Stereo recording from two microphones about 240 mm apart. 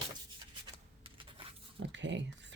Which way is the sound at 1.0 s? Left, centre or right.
Right.